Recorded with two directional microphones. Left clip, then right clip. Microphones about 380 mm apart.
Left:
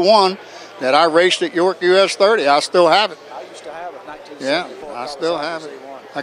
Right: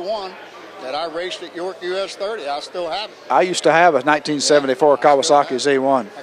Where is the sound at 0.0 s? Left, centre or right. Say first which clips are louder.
Left 13 dB; left.